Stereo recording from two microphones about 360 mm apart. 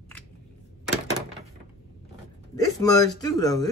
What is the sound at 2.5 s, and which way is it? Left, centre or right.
Speech, centre.